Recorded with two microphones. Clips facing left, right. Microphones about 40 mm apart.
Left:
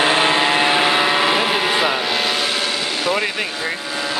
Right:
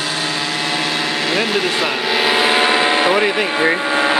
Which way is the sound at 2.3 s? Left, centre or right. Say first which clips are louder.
Right 7 dB; right.